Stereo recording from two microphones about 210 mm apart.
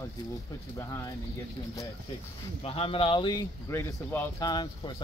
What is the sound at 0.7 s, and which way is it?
Speech, 15° left (ahead or behind).